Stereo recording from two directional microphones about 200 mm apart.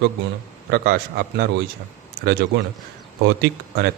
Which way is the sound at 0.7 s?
50° right (ahead or behind).